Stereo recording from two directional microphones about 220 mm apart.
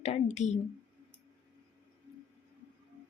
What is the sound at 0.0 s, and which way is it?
Speech, 30° left (ahead or behind).